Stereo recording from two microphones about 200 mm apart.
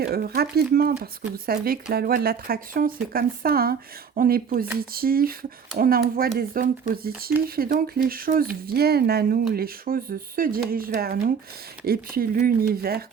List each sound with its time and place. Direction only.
0.0 s speech: 50° right (ahead or behind)